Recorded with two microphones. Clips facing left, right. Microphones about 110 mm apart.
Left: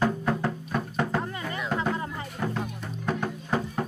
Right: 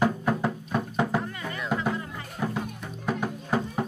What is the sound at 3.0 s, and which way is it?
Music, 10° right (ahead or behind).